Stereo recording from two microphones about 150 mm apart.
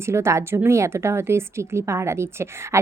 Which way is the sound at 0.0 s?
15° right (ahead or behind).